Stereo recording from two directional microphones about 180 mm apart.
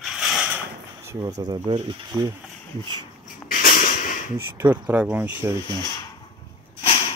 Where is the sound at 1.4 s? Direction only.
25° right (ahead or behind).